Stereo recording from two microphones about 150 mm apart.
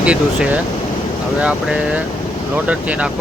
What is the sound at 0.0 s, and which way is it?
Speech, 10° right (ahead or behind).